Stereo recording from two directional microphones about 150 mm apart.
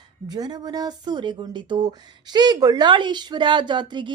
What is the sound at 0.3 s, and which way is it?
Speech, 25° right (ahead or behind).